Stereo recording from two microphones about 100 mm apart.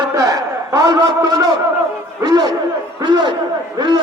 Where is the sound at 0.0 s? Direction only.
35° right (ahead or behind).